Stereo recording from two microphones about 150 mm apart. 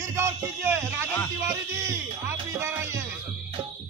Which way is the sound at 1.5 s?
20° right (ahead or behind).